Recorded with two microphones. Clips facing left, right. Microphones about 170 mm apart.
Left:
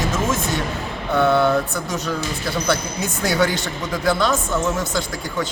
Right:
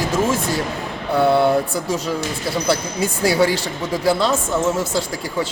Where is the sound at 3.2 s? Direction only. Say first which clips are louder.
Right 3 dB; 30° right (ahead or behind).